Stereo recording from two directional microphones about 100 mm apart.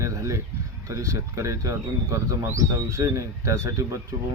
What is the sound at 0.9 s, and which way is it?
A man's voice, 30° right (ahead or behind).